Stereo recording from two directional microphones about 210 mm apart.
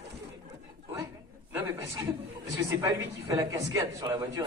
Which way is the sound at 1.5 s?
10° right (ahead or behind).